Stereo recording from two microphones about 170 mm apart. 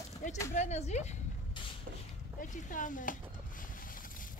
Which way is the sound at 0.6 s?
40° left (ahead or behind).